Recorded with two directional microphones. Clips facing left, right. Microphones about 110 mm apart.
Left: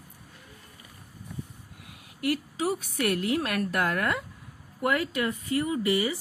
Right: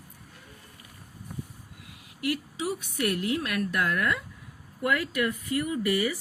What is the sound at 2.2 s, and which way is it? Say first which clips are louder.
A woman's voice: left 2 dB; 45° left (ahead or behind).